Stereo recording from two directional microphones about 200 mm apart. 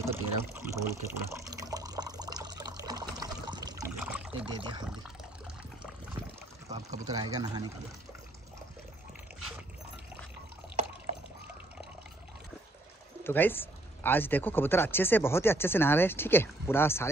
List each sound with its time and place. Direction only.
0.0 s water: 15° right (ahead or behind)
4.5 s speech: 25° right (ahead or behind)
7.1 s speech: 20° right (ahead or behind)
13.2 s speech: 10° left (ahead or behind)